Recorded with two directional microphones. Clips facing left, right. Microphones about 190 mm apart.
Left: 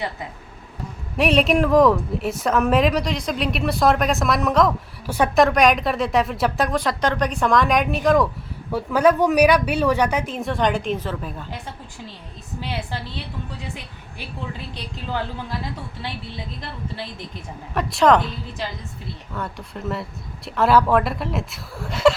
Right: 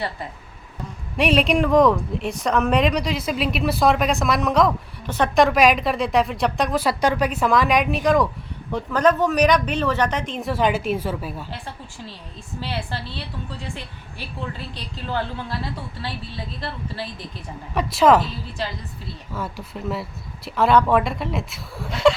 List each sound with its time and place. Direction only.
1.1 s a woman's voice: centre (ahead or behind)
12.5 s speech: 15° left (ahead or behind)
14.7 s speech: 15° left (ahead or behind)
17.7 s a woman's voice: centre (ahead or behind)
19.3 s a woman's voice: 5° right (ahead or behind)